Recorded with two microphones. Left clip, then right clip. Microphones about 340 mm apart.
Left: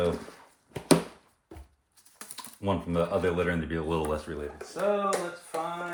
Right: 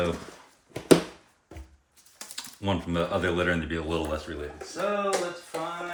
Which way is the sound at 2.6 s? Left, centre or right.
Centre.